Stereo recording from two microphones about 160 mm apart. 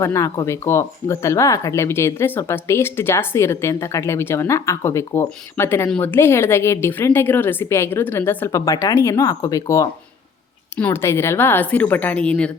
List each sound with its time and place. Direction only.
0.0 s speech: 20° left (ahead or behind)